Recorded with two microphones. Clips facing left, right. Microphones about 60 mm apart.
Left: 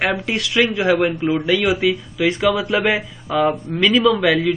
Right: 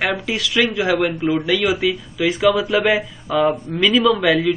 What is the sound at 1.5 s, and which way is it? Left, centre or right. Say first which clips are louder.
Speech: left 1 dB; centre.